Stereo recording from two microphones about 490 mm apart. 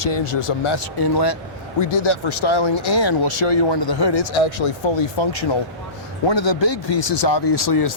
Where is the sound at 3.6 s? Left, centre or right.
Left.